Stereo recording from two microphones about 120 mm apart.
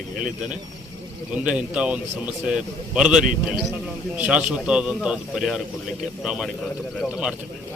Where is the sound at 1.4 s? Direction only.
10° right (ahead or behind).